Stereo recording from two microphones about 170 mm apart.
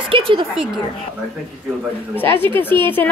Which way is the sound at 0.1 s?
30° right (ahead or behind).